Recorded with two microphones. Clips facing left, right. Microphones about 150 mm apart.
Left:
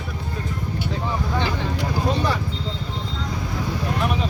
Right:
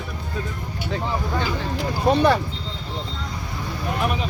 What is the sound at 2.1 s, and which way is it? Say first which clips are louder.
Speech: right 8 dB; 60° right (ahead or behind).